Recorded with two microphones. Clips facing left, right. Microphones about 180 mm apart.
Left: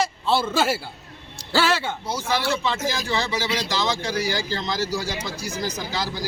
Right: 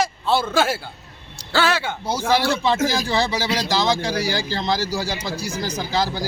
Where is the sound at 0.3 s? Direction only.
5° left (ahead or behind).